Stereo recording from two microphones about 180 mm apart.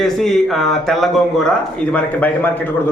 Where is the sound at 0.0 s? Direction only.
Centre (ahead or behind).